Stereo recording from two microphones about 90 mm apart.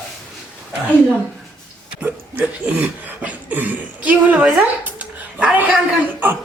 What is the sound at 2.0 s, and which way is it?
Cough, 20° right (ahead or behind).